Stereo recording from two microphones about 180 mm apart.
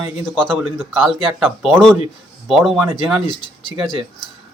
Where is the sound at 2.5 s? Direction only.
Centre (ahead or behind).